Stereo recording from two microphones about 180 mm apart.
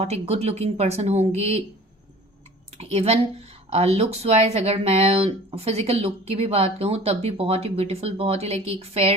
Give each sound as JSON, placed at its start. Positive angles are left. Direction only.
{"t": 0.0, "sound": "speech", "side_deg": -35}
{"t": 2.7, "sound": "speech", "side_deg": -35}